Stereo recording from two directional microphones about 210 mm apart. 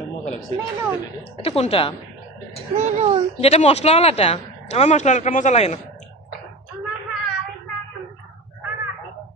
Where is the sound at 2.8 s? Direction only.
35° right (ahead or behind).